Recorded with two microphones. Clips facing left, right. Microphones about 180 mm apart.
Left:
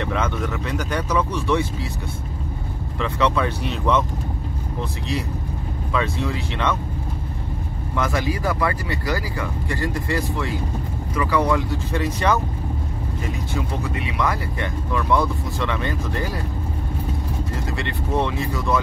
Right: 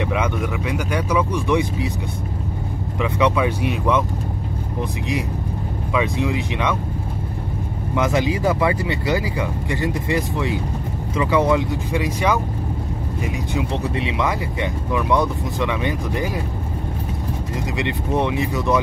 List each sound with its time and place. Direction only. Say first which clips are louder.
0.0 s speech: right 2 dB; 10° right (ahead or behind)
3.0 s speech: right 2 dB; 15° right (ahead or behind)
5.9 s speech: right 3 dB; 15° right (ahead or behind)
7.9 s speech: right 4 dB; 20° right (ahead or behind)
17.7 s speech: right 2 dB; 15° right (ahead or behind)